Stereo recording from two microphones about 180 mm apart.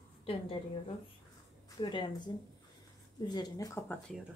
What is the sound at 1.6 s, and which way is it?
A woman's voice, 25° left (ahead or behind).